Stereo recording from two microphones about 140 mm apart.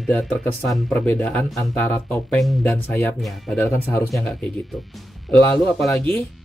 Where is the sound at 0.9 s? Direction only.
15° left (ahead or behind).